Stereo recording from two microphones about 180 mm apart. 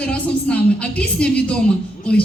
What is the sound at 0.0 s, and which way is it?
A woman's voice, 5° left (ahead or behind).